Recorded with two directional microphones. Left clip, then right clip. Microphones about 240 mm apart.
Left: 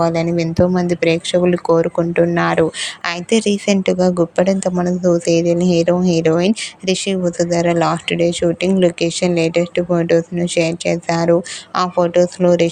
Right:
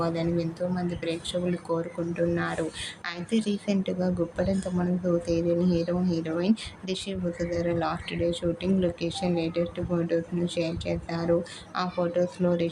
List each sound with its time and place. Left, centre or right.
0.0 s speech: left